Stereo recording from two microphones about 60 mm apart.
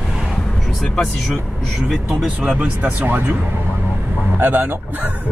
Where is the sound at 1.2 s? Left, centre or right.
Centre.